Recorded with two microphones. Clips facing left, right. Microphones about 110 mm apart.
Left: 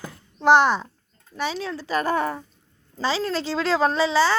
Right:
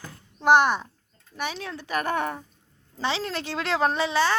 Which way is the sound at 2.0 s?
Centre (ahead or behind).